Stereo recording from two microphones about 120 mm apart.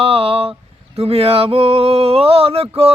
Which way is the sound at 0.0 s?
55° right (ahead or behind).